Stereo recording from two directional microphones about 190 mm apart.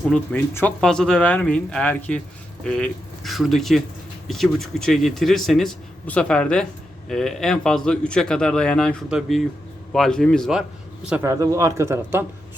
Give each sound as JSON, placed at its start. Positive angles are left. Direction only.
{"t": 0.1, "sound": "a man's voice", "side_deg": 10}
{"t": 11.3, "sound": "speech", "side_deg": -15}